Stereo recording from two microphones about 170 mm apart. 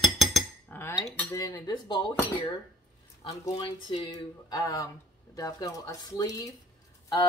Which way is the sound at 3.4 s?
25° left (ahead or behind).